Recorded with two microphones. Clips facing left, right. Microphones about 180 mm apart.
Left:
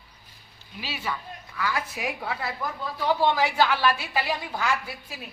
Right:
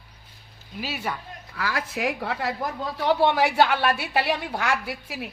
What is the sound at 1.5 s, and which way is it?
Speech, 80° right.